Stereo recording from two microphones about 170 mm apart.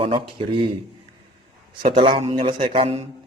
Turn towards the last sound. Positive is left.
turn(degrees=-35)  # may be behind; listen again after turning